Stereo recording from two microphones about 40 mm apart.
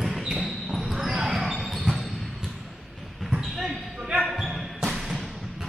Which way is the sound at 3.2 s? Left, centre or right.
Centre.